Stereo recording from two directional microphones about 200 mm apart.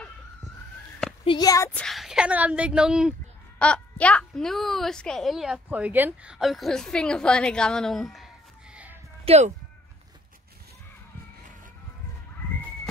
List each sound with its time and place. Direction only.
1.2 s speech: 20° left (ahead or behind)
1.7 s speech: 5° left (ahead or behind)
9.2 s speech: 30° right (ahead or behind)